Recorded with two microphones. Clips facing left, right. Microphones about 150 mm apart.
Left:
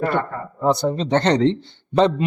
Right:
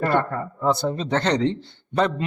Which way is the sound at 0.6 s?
15° left (ahead or behind).